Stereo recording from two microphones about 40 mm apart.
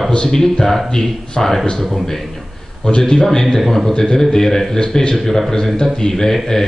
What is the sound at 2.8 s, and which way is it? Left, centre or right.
Speech, left.